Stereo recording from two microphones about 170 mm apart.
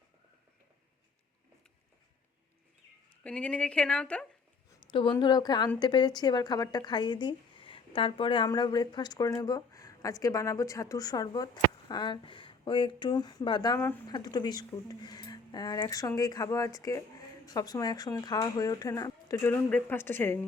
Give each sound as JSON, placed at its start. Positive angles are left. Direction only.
{"t": 3.2, "sound": "speech", "side_deg": 5}
{"t": 4.8, "sound": "a sound", "side_deg": 30}
{"t": 5.2, "sound": "speech", "side_deg": 25}